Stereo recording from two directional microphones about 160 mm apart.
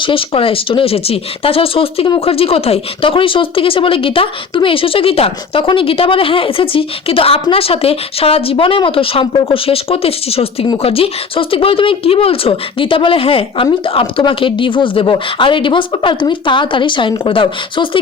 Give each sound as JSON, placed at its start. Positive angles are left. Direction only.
{"t": 0.0, "sound": "speech", "side_deg": 35}